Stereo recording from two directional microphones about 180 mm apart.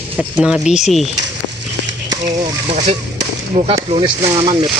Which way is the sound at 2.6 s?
40° right (ahead or behind).